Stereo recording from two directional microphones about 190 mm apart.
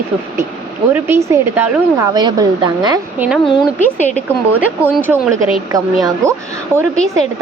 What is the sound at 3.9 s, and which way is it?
Speech, 40° left (ahead or behind).